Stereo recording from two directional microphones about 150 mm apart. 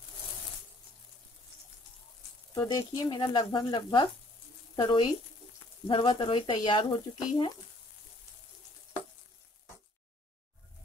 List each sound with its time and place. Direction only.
2.5 s speech: 25° left (ahead or behind)